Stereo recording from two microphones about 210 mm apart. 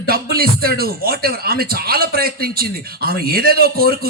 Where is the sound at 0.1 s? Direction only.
45° right (ahead or behind).